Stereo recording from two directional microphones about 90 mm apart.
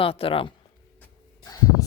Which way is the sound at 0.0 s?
90° left.